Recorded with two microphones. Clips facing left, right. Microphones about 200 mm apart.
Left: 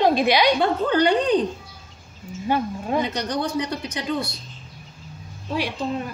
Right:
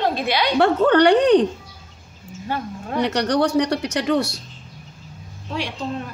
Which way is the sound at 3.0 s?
75° right (ahead or behind).